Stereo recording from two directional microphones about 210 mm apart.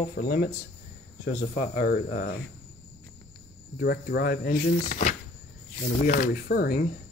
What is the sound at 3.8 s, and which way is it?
Speech, 50° left (ahead or behind).